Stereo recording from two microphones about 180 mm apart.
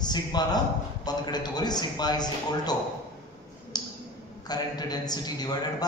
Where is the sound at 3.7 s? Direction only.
20° left (ahead or behind).